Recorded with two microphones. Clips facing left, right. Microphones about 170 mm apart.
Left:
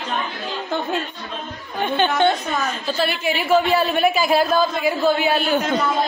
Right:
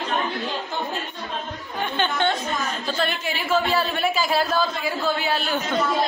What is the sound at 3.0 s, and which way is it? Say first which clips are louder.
A man's voice: left 5 dB; 15° left (ahead or behind).